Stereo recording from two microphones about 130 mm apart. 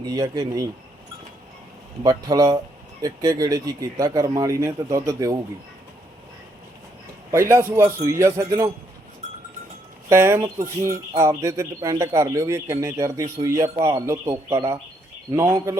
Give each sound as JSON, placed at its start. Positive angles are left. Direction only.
{"t": 0.0, "sound": "speech", "side_deg": -30}
{"t": 2.0, "sound": "speech", "side_deg": -30}
{"t": 7.3, "sound": "speech", "side_deg": -20}
{"t": 10.1, "sound": "speech", "side_deg": -20}